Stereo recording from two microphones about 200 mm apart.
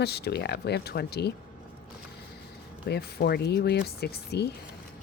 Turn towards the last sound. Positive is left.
turn(degrees=55)  # may be behind; listen again after turning